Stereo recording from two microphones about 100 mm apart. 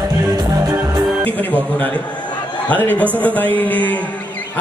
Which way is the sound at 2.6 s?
15° left (ahead or behind).